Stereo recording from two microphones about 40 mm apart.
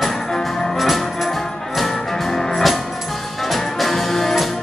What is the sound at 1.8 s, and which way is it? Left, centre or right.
Music, centre.